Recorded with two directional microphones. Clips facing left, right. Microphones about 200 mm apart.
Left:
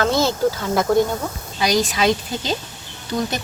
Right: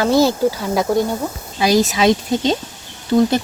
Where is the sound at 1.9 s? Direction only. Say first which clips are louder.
Right 4 dB; 20° right (ahead or behind).